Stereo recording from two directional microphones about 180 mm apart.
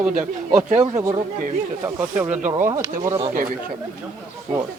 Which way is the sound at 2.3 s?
45° right (ahead or behind).